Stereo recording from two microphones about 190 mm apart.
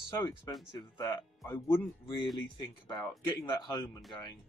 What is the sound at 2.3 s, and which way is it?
Speech, 25° left (ahead or behind).